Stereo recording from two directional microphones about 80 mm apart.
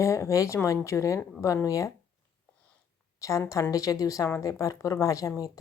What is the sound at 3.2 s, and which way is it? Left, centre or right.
A woman's voice, left.